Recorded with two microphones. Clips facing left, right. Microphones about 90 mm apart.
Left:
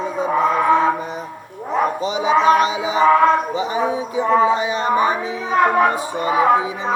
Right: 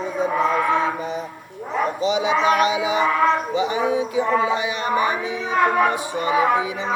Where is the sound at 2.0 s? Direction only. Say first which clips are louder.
Left 3 dB; 40° left (ahead or behind).